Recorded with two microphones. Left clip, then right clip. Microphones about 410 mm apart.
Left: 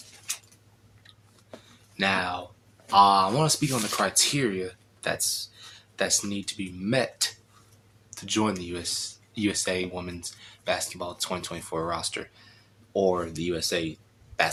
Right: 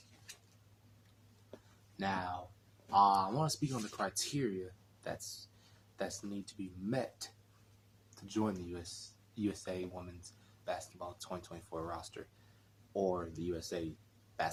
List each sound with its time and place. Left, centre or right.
2.0 s speech: right